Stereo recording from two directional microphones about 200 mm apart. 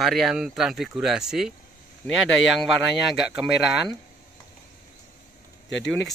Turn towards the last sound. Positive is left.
turn(degrees=60)  # may be behind; listen again after turning